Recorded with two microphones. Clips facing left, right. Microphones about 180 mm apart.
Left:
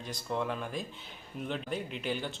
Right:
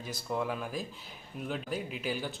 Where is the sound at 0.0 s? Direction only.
5° right (ahead or behind).